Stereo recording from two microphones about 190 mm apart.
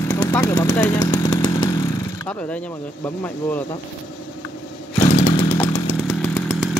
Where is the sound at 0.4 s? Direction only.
20° left (ahead or behind).